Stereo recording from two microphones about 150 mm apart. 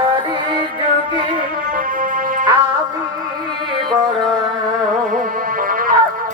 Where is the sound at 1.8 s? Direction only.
65° right (ahead or behind).